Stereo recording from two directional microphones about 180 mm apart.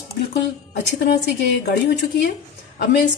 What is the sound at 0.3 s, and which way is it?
A woman's voice, 65° left (ahead or behind).